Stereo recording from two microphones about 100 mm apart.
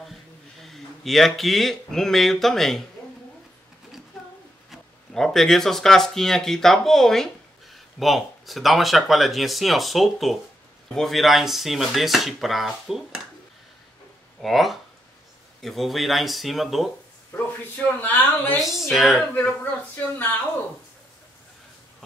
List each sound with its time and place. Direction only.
0.6 s speech: centre (ahead or behind)
4.6 s speech: 5° left (ahead or behind)
14.4 s speech: centre (ahead or behind)
17.3 s a man's voice: 20° left (ahead or behind)
18.6 s speech: 5° right (ahead or behind)
19.3 s speech: 15° left (ahead or behind)